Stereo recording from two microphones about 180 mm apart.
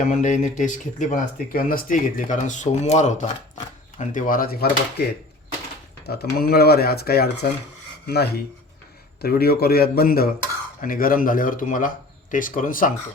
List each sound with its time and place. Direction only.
0.0 s speech: 45° left (ahead or behind)
6.1 s speech: 60° left (ahead or behind)